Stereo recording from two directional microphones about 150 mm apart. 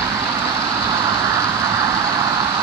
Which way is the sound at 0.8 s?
25° right (ahead or behind).